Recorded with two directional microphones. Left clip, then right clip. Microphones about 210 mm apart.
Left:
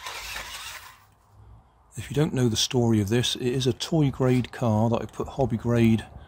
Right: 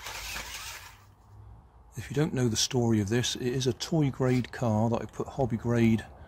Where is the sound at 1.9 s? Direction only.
10° left (ahead or behind).